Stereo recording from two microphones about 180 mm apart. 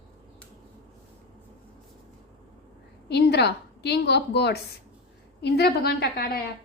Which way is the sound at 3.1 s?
65° left (ahead or behind).